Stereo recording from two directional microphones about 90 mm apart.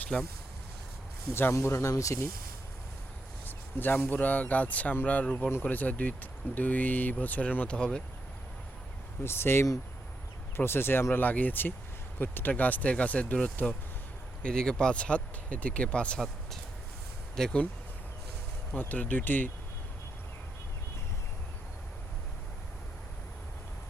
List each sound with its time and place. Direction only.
0.1 s speech: 15° left (ahead or behind)
1.3 s speech: 25° left (ahead or behind)
3.4 s speech: 20° left (ahead or behind)
9.2 s speech: 25° left (ahead or behind); by 17.6 s 5° left (ahead or behind)
18.7 s speech: 15° left (ahead or behind)